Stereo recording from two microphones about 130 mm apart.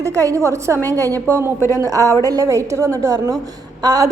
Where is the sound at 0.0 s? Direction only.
25° right (ahead or behind).